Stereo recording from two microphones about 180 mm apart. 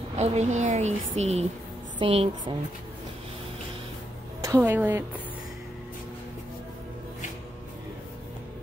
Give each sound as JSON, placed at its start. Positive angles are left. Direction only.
{"t": 0.1, "sound": "a woman's voice", "side_deg": -40}
{"t": 4.4, "sound": "a woman's voice", "side_deg": -15}